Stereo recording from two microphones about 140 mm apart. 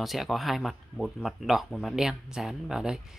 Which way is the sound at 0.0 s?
Centre (ahead or behind).